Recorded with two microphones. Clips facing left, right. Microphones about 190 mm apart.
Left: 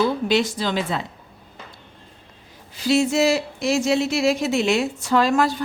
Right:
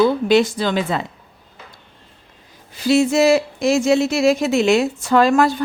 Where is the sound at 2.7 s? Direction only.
55° right (ahead or behind).